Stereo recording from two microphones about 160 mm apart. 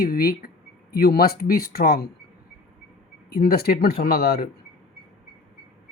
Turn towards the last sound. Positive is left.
turn(degrees=75)  # may be behind; listen again after turning